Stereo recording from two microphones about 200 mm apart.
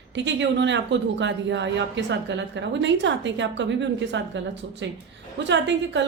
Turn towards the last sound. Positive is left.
turn(degrees=-60)  # may be behind; listen again after turning